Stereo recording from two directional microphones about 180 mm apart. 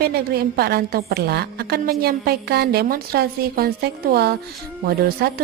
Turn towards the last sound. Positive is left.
turn(degrees=-55)  # may be behind; listen again after turning